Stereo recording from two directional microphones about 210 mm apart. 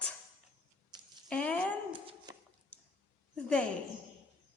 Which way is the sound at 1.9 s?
25° right (ahead or behind).